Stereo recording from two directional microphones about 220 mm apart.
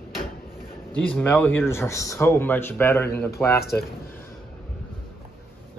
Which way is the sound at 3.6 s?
45° left (ahead or behind).